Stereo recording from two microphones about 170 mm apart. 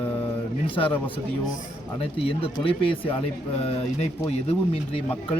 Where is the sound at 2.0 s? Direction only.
35° left (ahead or behind).